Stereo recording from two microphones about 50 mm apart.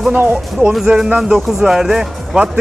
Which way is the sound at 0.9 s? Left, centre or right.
Centre.